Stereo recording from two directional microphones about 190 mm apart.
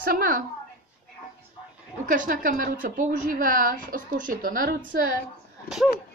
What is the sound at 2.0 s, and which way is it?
A woman's voice, 45° right (ahead or behind).